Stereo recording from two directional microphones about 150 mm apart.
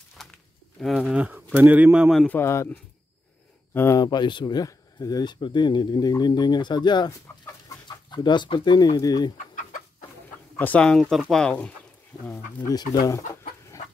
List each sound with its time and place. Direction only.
0.2 s speech: centre (ahead or behind)
2.2 s speech: 15° left (ahead or behind)
9.4 s chicken: 60° left (ahead or behind)
10.6 s speech: 10° left (ahead or behind)
13.0 s speech: 20° left (ahead or behind)